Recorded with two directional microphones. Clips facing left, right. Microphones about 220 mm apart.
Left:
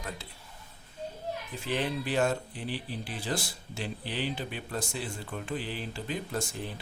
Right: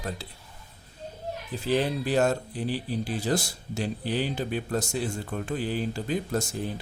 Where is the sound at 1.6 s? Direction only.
35° right (ahead or behind).